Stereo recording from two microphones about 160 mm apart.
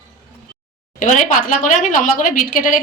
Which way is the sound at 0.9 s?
50° left (ahead or behind).